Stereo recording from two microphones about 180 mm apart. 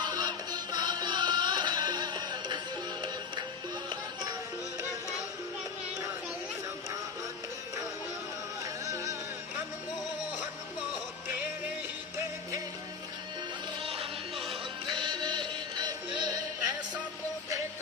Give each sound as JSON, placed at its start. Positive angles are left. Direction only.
{"t": 0.0, "sound": "music", "side_deg": -25}
{"t": 8.6, "sound": "music", "side_deg": -20}
{"t": 13.8, "sound": "music", "side_deg": -30}